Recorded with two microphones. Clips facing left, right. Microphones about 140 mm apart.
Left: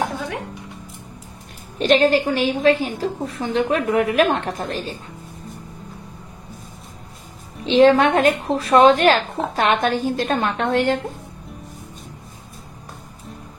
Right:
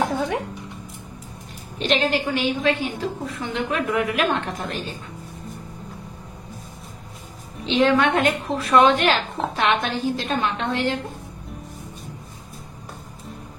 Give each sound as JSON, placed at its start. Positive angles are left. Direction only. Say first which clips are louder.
{"t": 1.8, "sound": "a woman's voice", "louder": "left 6 dB", "side_deg": 45}
{"t": 7.6, "sound": "a woman's voice", "louder": "left 5 dB", "side_deg": 35}